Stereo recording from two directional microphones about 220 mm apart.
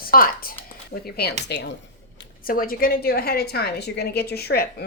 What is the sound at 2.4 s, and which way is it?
A woman's voice, 40° left (ahead or behind).